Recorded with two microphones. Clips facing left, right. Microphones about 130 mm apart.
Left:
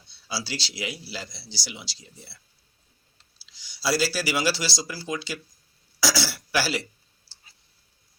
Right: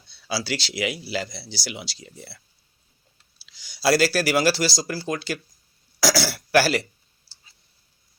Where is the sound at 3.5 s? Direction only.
55° right (ahead or behind).